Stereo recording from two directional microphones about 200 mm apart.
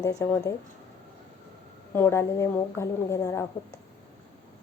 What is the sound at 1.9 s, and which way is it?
A woman's voice, 10° left (ahead or behind).